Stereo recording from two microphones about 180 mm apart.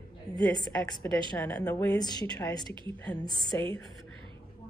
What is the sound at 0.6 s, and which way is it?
Speech, 20° left (ahead or behind).